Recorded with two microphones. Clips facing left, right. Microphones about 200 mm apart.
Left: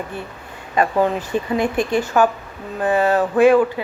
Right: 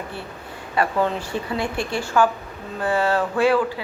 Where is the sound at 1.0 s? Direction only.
20° left (ahead or behind).